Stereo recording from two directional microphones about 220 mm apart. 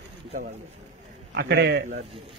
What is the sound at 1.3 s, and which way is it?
Speech, 50° right (ahead or behind).